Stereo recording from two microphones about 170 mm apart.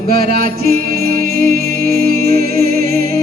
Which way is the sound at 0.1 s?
60° right (ahead or behind).